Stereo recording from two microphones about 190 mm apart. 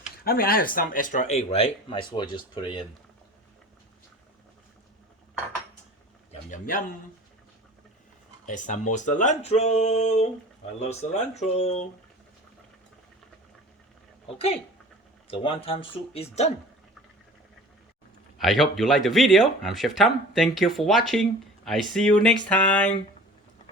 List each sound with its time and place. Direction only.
0.3 s speech: 50° left (ahead or behind); by 2.8 s 25° left (ahead or behind)
6.5 s a man's voice: 45° left (ahead or behind)
8.4 s speech: 40° left (ahead or behind)
14.3 s speech: 30° left (ahead or behind)
18.3 s speech: centre (ahead or behind)
22.4 s a sound: 5° left (ahead or behind)